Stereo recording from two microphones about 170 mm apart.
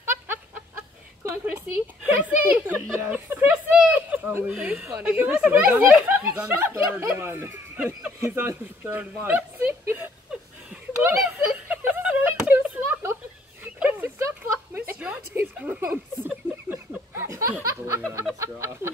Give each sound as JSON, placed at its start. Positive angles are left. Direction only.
{"t": 0.0, "sound": "chicken", "side_deg": -15}
{"t": 2.0, "sound": "speech", "side_deg": -10}
{"t": 9.8, "sound": "a sound", "side_deg": -10}
{"t": 18.4, "sound": "speech", "side_deg": -15}